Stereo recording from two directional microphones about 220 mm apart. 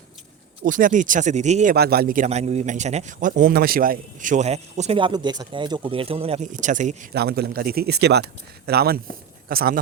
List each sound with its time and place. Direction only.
0.6 s a man's voice: 35° right (ahead or behind)
1.7 s a man's voice: 45° right (ahead or behind)